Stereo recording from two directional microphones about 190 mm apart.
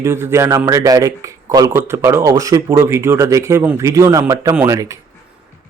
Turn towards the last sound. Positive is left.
turn(degrees=-15)  # may be behind; listen again after turning